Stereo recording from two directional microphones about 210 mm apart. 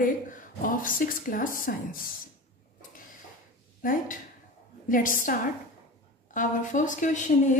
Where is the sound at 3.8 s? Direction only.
40° left (ahead or behind).